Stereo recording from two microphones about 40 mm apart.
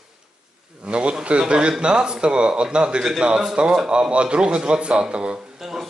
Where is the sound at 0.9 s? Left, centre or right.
Right.